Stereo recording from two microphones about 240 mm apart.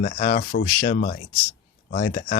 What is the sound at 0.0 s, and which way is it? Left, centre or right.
Speech, left.